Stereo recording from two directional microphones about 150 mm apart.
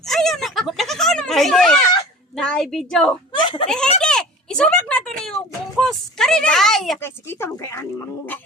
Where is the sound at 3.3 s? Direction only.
30° left (ahead or behind).